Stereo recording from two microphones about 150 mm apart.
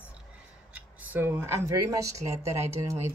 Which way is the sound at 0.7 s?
15° right (ahead or behind).